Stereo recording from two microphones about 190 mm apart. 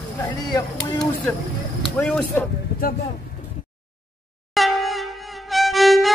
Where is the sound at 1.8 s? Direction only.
5° left (ahead or behind).